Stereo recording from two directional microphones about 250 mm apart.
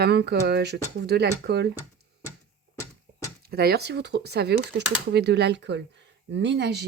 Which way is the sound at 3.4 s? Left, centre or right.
Right.